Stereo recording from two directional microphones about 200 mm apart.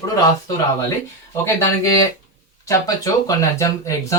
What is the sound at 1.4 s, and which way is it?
Speech, 15° left (ahead or behind).